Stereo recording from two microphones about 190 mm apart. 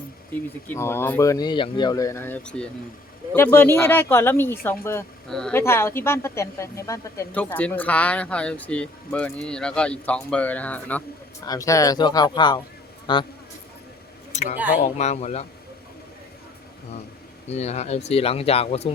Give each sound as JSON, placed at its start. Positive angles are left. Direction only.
{"t": 0.3, "sound": "a woman's voice", "side_deg": 10}
{"t": 14.3, "sound": "a sound", "side_deg": 40}
{"t": 14.8, "sound": "speech", "side_deg": 35}
{"t": 17.5, "sound": "speech", "side_deg": 35}